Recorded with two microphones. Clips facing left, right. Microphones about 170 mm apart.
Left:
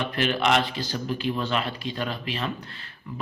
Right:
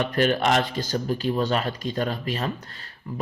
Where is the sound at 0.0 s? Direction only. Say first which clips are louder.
Right 3 dB; 45° right (ahead or behind).